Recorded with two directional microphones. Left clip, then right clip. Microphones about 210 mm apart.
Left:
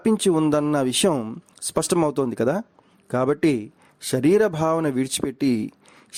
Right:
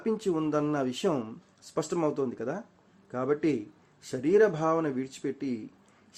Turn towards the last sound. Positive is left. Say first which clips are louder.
# left 10 dB
turn(degrees=55)  # may be behind; listen again after turning